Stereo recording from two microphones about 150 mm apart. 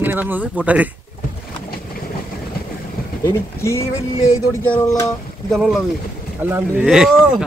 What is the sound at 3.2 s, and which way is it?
Speech, 20° left (ahead or behind).